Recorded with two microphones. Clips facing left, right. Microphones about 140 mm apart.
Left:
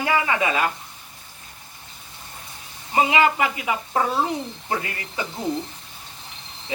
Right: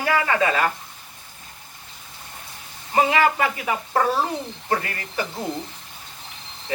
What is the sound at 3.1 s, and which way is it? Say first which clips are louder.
Speech: even; 20° left (ahead or behind).